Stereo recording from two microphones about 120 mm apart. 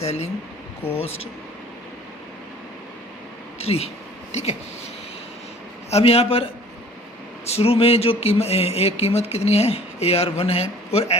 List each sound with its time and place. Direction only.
0.0 s speech: 60° left (ahead or behind)
0.8 s speech: 20° left (ahead or behind)
3.6 s speech: 60° left (ahead or behind)
5.9 s speech: 55° left (ahead or behind)